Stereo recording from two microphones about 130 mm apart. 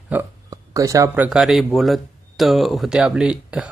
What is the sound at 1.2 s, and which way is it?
Speech, 5° right (ahead or behind).